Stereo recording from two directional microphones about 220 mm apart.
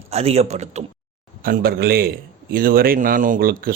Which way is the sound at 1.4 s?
45° right (ahead or behind).